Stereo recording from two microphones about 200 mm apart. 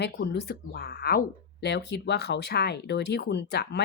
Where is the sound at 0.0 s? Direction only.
55° left (ahead or behind).